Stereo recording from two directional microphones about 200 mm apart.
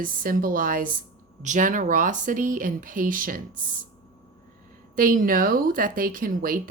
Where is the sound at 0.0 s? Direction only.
45° right (ahead or behind).